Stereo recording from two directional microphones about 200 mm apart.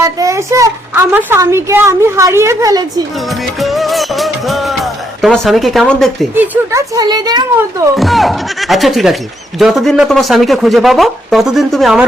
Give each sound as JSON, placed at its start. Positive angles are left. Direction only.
{"t": 0.0, "sound": "a child's voice", "side_deg": -15}
{"t": 3.6, "sound": "speech", "side_deg": 0}
{"t": 6.3, "sound": "a child's voice", "side_deg": -10}
{"t": 7.9, "sound": "speech", "side_deg": 0}